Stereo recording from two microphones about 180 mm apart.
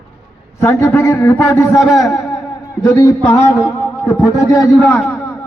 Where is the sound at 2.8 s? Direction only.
20° left (ahead or behind).